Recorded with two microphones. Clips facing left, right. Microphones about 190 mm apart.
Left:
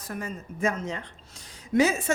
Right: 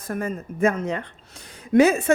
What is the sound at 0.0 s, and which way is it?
A woman's voice, 50° right (ahead or behind).